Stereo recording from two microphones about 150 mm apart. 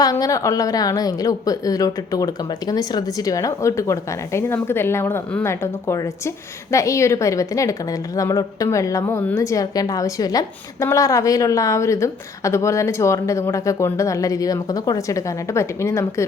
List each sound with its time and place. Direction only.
0.0 s a woman's voice: 25° left (ahead or behind)